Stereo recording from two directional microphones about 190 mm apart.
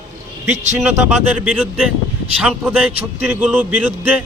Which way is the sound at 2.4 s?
5° left (ahead or behind).